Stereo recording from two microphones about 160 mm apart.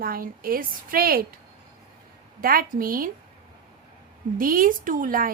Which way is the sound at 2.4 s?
65° right (ahead or behind).